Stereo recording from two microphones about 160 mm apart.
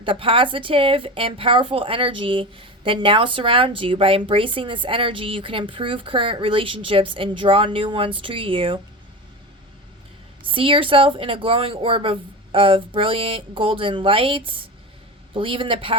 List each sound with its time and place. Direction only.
0.0 s speech: 35° right (ahead or behind)
10.4 s speech: 35° right (ahead or behind)